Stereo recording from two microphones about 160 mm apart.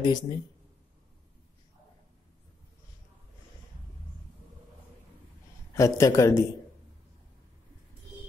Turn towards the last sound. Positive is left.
turn(degrees=20)  # may be behind; listen again after turning